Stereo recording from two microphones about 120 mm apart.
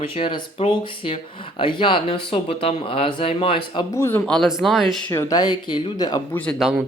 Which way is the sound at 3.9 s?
20° left (ahead or behind).